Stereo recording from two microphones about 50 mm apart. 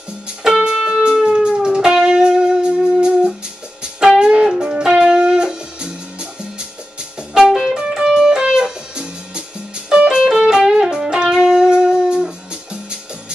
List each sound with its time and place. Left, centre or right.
0.4 s music: centre
7.3 s music: centre